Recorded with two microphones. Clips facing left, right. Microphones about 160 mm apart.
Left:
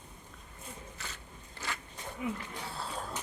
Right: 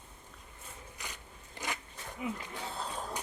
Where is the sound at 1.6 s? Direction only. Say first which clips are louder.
Right 1 dB; 15° right (ahead or behind).